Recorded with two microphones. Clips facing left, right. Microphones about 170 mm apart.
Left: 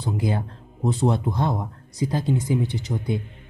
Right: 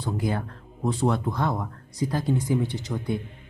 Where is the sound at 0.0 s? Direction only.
20° left (ahead or behind).